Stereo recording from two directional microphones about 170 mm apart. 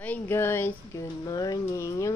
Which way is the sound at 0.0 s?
10° left (ahead or behind).